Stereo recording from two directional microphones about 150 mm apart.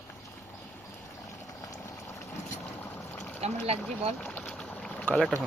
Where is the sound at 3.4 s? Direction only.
45° right (ahead or behind).